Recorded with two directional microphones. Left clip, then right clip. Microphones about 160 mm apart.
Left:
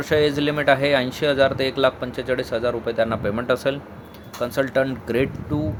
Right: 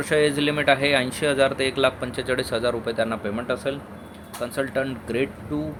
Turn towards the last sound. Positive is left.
turn(degrees=25)  # may be behind; listen again after turning